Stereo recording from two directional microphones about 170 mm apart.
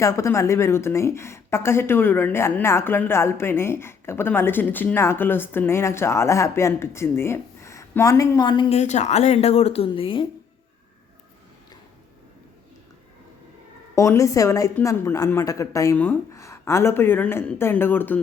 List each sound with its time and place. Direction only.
0.0 s speech: 20° left (ahead or behind)
8.7 s a woman's voice: 40° left (ahead or behind)
13.9 s speech: 20° left (ahead or behind)